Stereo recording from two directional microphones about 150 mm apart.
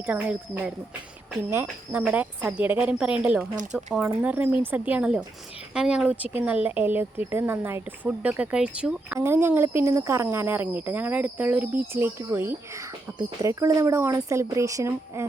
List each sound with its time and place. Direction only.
0.0 s speech: 10° right (ahead or behind)
3.5 s speech: 60° right (ahead or behind)
4.0 s speech: 10° right (ahead or behind)